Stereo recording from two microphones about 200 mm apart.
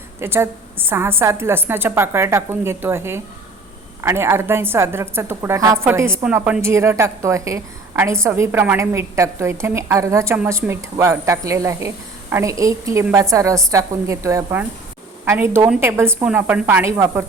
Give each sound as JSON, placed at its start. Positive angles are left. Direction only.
{"t": 0.2, "sound": "a woman's voice", "side_deg": -10}